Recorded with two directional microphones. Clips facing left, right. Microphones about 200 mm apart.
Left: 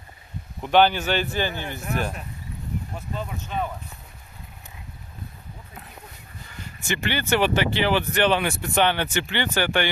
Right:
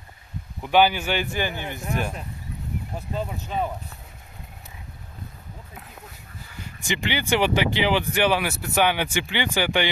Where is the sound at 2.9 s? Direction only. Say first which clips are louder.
Right 2 dB; 35° right (ahead or behind).